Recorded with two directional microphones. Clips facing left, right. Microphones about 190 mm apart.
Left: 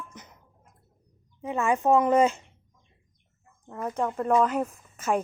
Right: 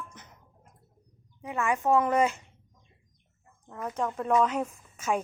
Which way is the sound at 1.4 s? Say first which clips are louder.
Left 4 dB; 25° left (ahead or behind).